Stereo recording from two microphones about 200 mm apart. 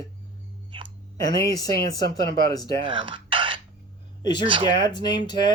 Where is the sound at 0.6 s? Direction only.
25° right (ahead or behind).